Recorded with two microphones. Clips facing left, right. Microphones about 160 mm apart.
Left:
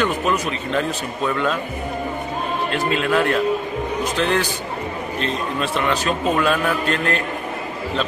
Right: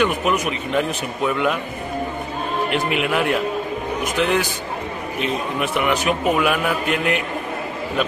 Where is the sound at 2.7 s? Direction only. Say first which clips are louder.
Left 2 dB; 15° right (ahead or behind).